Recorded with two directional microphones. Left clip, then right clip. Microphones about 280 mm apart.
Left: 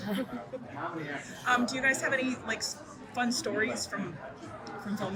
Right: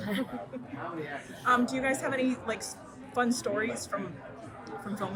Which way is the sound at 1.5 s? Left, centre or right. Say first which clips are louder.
Even; centre.